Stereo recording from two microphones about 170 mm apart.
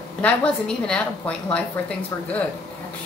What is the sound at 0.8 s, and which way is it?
Speech, 5° left (ahead or behind).